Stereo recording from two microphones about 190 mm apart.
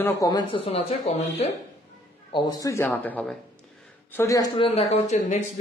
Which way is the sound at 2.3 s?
20° left (ahead or behind).